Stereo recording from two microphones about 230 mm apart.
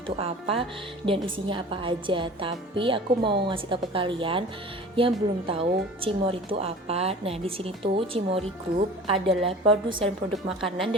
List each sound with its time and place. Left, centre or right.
0.2 s speech: right
10.3 s a woman's voice: centre